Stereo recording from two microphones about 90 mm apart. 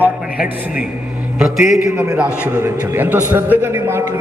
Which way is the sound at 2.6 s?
25° right (ahead or behind).